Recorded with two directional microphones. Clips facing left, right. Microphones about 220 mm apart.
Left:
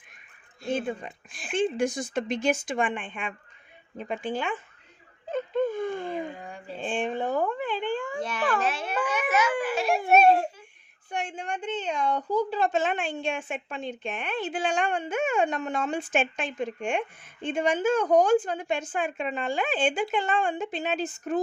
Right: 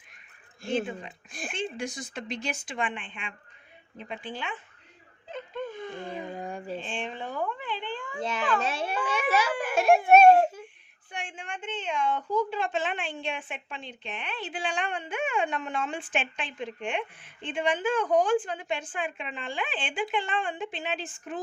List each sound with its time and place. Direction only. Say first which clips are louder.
0.7 s a woman's voice: left 1 dB; 50° left (ahead or behind)
1.3 s speech: right 3 dB; 45° right (ahead or behind)
1.5 s a woman's voice: left 9 dB; 50° left (ahead or behind)
5.3 s a sound: left 9 dB; 50° left (ahead or behind)
6.4 s a sound: right 5 dB; 45° right (ahead or behind)
6.7 s speech: left 6 dB; 45° left (ahead or behind)
8.2 s a child's voice: right 1 dB; 25° right (ahead or behind)
9.6 s speech: right 3 dB; 50° right (ahead or behind)
11.1 s a woman's voice: left 7 dB; 40° left (ahead or behind)